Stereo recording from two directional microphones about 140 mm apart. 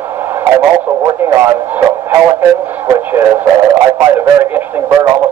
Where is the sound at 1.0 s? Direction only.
20° right (ahead or behind).